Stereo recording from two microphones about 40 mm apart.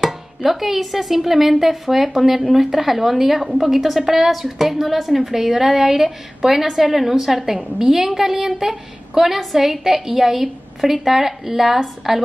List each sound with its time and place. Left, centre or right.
0.0 s a woman's voice: centre